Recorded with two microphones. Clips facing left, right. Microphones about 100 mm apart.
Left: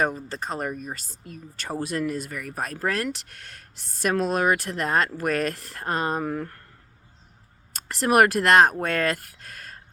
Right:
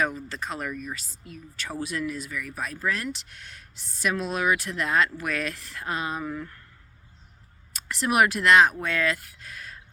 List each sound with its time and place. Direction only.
0.0 s speech: 35° left (ahead or behind)
7.7 s speech: 45° left (ahead or behind)